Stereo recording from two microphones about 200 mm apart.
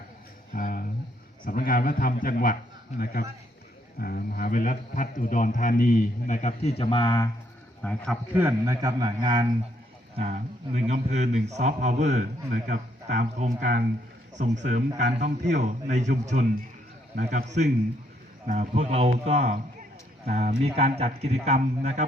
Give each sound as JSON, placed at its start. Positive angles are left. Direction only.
{"t": 0.5, "sound": "a sound", "side_deg": 45}
{"t": 1.5, "sound": "a man's voice", "side_deg": 45}
{"t": 7.8, "sound": "a man's voice", "side_deg": 5}
{"t": 8.3, "sound": "a man's voice", "side_deg": -10}
{"t": 18.4, "sound": "a man's voice", "side_deg": -40}